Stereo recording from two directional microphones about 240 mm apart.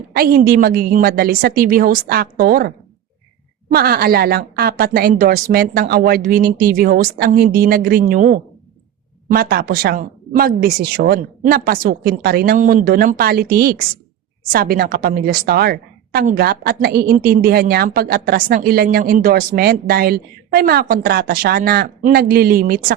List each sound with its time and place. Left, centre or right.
0.1 s a woman's voice: right